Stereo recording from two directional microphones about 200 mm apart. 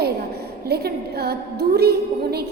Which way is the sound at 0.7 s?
50° right (ahead or behind).